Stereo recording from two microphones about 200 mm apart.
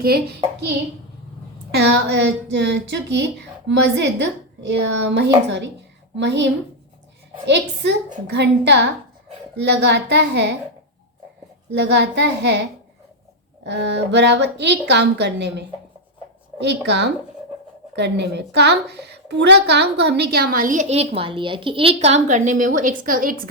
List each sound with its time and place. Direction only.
0.0 s a woman's voice: 50° right (ahead or behind)
1.7 s a woman's voice: 60° right (ahead or behind)
11.7 s a woman's voice: 60° right (ahead or behind)
13.7 s a woman's voice: 60° right (ahead or behind)